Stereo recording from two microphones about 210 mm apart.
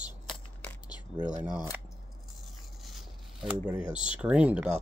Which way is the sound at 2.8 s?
Centre (ahead or behind).